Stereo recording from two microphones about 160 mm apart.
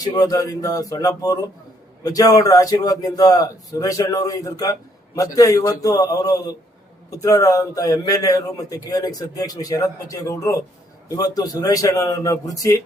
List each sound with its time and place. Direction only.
0.0 s a man's voice: 25° left (ahead or behind)